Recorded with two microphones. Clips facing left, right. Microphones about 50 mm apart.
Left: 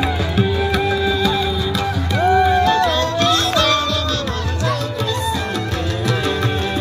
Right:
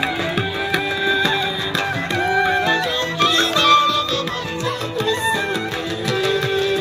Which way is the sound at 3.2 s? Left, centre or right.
Centre.